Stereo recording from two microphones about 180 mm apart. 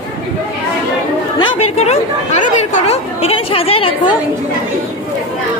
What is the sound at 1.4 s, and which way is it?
Speech, 35° left (ahead or behind).